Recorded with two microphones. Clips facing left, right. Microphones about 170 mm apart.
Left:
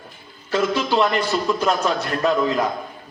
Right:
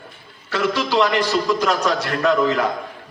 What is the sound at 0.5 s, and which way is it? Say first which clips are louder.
A man's voice: even; 70° right (ahead or behind).